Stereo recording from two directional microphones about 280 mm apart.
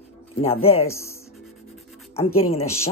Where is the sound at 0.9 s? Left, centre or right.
Centre.